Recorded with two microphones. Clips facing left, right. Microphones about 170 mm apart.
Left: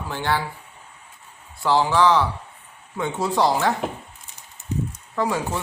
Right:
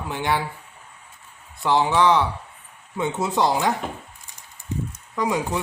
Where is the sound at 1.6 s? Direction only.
20° right (ahead or behind).